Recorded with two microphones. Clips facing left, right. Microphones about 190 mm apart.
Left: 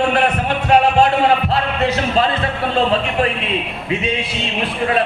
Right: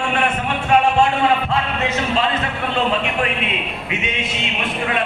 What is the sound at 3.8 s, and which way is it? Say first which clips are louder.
A man's voice: left 6 dB; 35° left (ahead or behind).